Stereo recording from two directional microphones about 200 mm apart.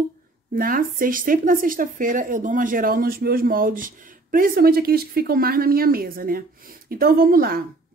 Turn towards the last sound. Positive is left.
turn(degrees=-50)  # may be behind; listen again after turning